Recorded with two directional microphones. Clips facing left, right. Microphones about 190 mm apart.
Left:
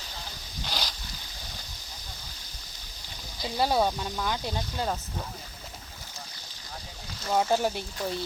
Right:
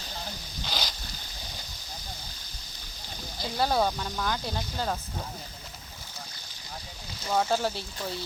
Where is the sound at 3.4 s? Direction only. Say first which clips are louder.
Left 1 dB; 5° left (ahead or behind).